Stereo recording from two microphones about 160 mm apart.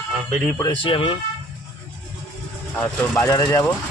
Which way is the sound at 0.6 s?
30° left (ahead or behind).